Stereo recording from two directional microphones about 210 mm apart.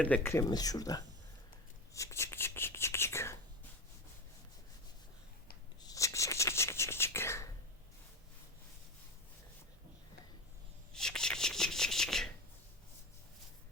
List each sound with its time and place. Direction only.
0.0 s speech: 10° left (ahead or behind)
1.9 s a sound: 15° left (ahead or behind)
5.8 s whispering: 15° left (ahead or behind)
10.9 s shuffling cards: 5° left (ahead or behind)